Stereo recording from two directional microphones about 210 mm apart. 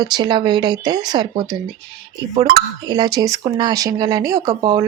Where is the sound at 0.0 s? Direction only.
20° right (ahead or behind).